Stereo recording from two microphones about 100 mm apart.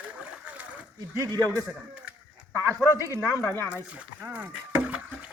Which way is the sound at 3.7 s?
15° right (ahead or behind).